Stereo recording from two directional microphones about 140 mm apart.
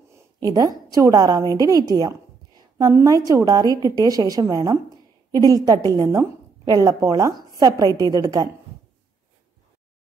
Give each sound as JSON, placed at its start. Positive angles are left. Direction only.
{"t": 0.4, "sound": "a woman's voice", "side_deg": -30}